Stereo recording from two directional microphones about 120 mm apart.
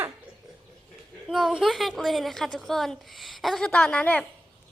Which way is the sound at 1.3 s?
Centre (ahead or behind).